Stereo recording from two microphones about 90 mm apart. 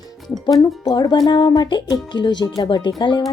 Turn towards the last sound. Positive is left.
turn(degrees=55)  # may be behind; listen again after turning